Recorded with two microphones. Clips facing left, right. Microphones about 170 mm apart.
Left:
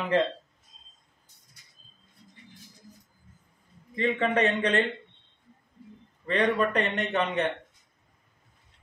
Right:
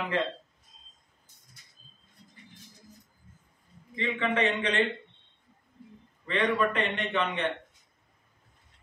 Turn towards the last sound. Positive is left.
turn(degrees=40)  # may be behind; listen again after turning